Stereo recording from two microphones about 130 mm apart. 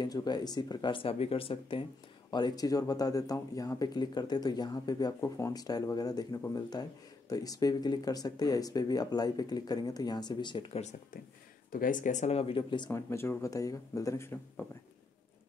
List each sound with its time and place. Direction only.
0.0 s speech: 30° left (ahead or behind)
2.3 s speech: 30° left (ahead or behind)
11.7 s speech: 90° left; by 12.9 s 40° left (ahead or behind)
12.9 s speech: 20° left (ahead or behind)